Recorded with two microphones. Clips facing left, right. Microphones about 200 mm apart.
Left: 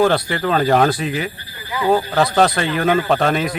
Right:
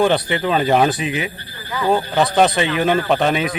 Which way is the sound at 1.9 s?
5° right (ahead or behind).